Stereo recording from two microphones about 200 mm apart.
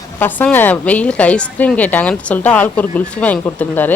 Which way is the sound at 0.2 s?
10° left (ahead or behind).